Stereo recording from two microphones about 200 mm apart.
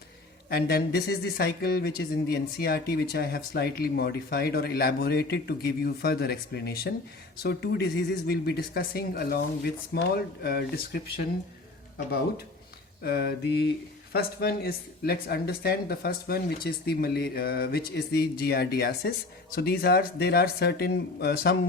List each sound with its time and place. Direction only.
0.5 s speech: 55° left (ahead or behind)
13.0 s speech: 50° left (ahead or behind)